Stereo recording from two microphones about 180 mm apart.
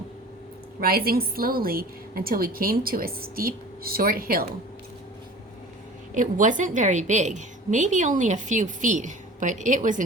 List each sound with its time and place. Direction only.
0.8 s a woman's voice: 55° right (ahead or behind)
6.1 s a woman's voice: 45° right (ahead or behind)